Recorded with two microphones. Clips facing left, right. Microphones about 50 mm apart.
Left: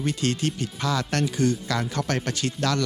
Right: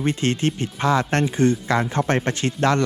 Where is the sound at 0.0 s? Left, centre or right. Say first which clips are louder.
Right 4 dB; right.